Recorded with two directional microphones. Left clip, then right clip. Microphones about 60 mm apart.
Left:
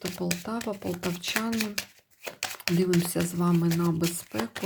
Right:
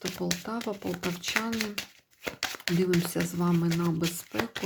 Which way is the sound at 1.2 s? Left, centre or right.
Left.